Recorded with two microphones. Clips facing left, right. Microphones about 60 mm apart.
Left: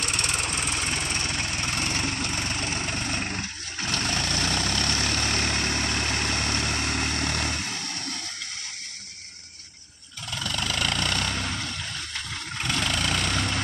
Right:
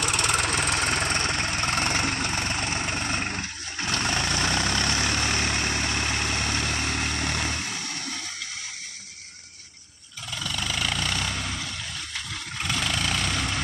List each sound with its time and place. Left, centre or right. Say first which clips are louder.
0.2 s vehicle: right 4 dB; right
1.3 s vehicle: right 3 dB; right
2.0 s vehicle: right 2 dB; right; by 8.2 s centre
10.3 s a sound: left 1 dB; centre
12.5 s vehicle: even; centre